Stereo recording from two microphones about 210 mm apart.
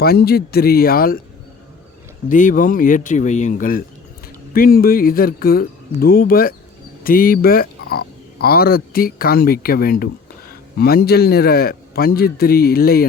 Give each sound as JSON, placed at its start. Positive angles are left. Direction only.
{"t": 0.0, "sound": "speech", "side_deg": 50}
{"t": 2.3, "sound": "speech", "side_deg": 40}